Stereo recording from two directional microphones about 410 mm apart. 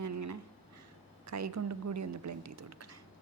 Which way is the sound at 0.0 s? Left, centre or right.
Right.